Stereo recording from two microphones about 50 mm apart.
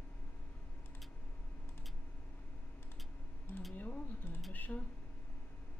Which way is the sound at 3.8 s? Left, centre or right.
Left.